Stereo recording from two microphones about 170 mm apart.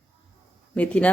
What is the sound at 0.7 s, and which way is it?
Speech, 5° left (ahead or behind).